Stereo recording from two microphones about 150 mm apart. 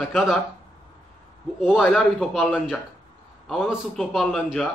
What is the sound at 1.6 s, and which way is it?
Speech, 5° right (ahead or behind).